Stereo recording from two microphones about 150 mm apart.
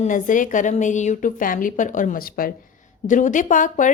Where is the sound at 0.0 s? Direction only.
60° left (ahead or behind).